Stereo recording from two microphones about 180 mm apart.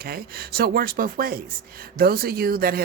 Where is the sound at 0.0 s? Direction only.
55° right (ahead or behind).